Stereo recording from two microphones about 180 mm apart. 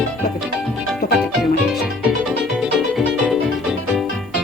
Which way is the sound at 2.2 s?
Centre (ahead or behind).